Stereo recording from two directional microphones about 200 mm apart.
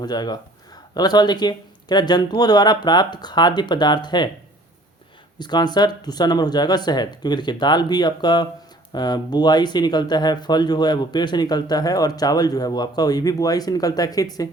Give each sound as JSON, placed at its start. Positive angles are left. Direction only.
{"t": 0.0, "sound": "speech", "side_deg": 20}
{"t": 5.4, "sound": "speech", "side_deg": 20}